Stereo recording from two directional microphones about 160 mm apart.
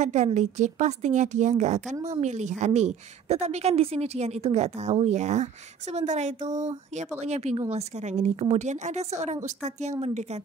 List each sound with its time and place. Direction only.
0.0 s a woman's voice: 45° right (ahead or behind)